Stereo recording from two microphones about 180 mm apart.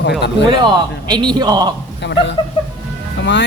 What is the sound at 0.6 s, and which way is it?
A man's voice, 25° right (ahead or behind).